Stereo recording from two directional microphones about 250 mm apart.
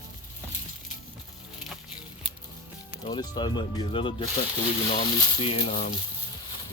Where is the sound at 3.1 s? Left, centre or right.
Centre.